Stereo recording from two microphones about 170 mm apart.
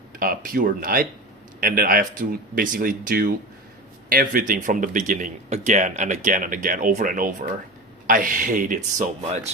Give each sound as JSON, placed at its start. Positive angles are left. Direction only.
{"t": 0.2, "sound": "speech", "side_deg": -55}